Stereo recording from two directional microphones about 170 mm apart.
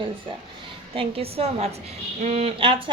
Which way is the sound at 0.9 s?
35° right (ahead or behind).